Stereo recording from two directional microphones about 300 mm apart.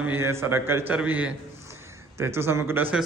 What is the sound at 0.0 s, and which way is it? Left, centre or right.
A man's voice, centre.